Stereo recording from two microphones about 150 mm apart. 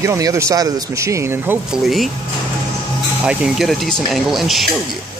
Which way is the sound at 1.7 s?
Centre (ahead or behind).